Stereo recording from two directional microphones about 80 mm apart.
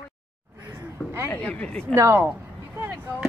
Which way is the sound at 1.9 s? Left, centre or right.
Right.